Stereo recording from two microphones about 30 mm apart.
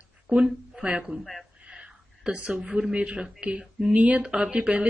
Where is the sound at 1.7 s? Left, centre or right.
Right.